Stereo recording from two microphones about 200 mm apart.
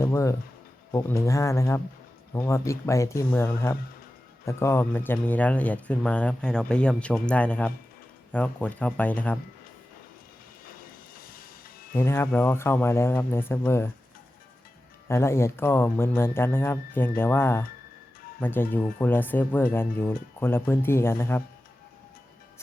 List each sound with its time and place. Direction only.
0.0 s speech: 15° left (ahead or behind)
11.2 s music: 45° left (ahead or behind)
11.9 s speech: 10° left (ahead or behind)
15.0 s speech: 15° left (ahead or behind)